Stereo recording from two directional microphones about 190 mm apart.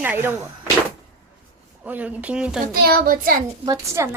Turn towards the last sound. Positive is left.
turn(degrees=-15)  # may be behind; listen again after turning